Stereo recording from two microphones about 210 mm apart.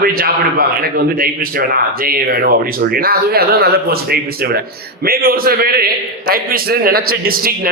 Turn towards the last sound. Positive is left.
turn(degrees=-45)  # may be behind; listen again after turning